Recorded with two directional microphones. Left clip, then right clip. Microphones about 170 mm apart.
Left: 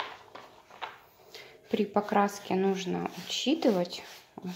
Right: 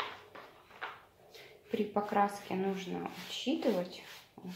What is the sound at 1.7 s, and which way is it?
Speech, 65° left (ahead or behind).